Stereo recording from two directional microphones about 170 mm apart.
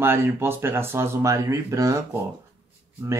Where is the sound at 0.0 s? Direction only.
15° right (ahead or behind).